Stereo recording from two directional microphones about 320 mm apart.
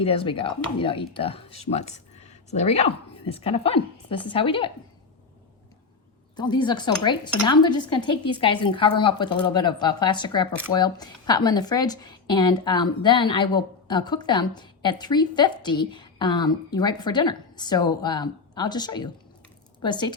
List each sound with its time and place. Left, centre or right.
0.0 s speech: centre
6.3 s speech: centre